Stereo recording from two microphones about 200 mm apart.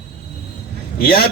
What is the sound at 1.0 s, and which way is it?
Speech, 50° left (ahead or behind).